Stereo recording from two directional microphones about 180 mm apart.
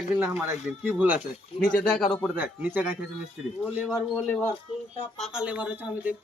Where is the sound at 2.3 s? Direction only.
10° right (ahead or behind).